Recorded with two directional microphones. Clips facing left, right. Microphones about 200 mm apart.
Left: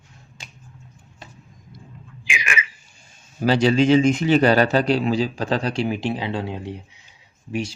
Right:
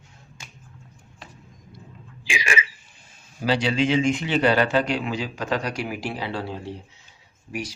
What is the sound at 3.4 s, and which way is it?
A man's voice, 45° left (ahead or behind).